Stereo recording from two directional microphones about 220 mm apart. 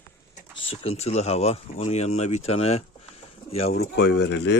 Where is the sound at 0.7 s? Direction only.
25° left (ahead or behind).